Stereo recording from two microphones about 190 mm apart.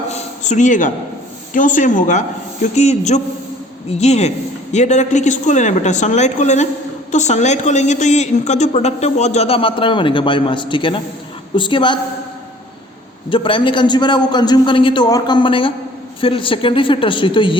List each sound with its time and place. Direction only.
0.1 s a sound: 40° left (ahead or behind)
1.5 s a woman's voice: 45° left (ahead or behind); by 11.9 s 25° left (ahead or behind)
13.3 s a man's voice: 25° left (ahead or behind)